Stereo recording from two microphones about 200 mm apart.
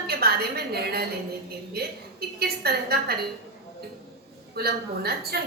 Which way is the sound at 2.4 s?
50° right (ahead or behind).